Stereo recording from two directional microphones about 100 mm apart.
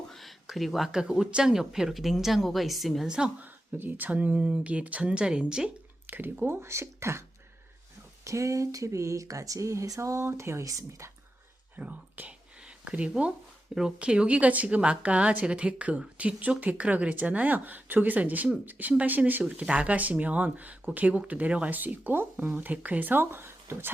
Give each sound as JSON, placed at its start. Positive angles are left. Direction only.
{"t": 0.1, "sound": "speech", "side_deg": 0}
{"t": 11.8, "sound": "speech", "side_deg": -15}